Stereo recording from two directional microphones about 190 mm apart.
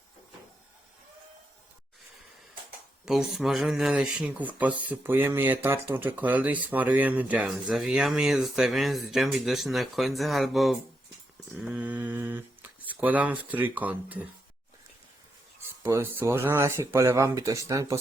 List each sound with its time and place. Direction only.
3.1 s speech: centre (ahead or behind)
15.8 s speech: 15° right (ahead or behind)